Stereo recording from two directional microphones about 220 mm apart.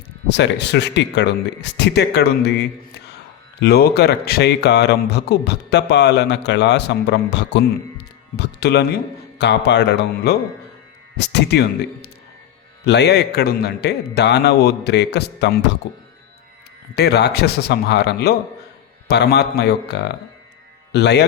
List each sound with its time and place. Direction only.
0.3 s speech: 50° left (ahead or behind)
12.8 s speech: 50° left (ahead or behind)